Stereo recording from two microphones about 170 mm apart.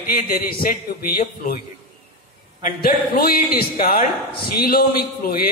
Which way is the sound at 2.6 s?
60° left (ahead or behind).